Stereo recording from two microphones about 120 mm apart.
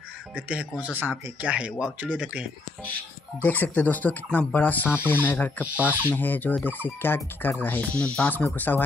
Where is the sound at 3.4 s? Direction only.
15° left (ahead or behind).